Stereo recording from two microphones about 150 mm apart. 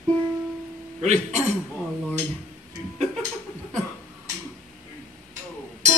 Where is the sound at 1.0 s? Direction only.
50° right (ahead or behind).